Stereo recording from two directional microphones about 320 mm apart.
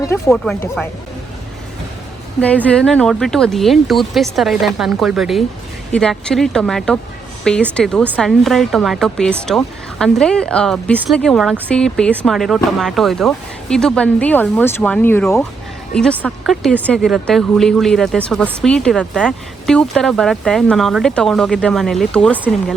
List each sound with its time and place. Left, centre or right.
0.0 s speech: centre
2.4 s speech: centre